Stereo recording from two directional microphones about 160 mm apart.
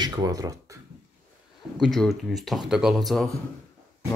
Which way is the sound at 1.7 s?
Centre (ahead or behind).